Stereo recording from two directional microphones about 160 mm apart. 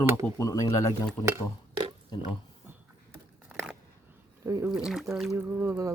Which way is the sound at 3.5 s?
10° right (ahead or behind).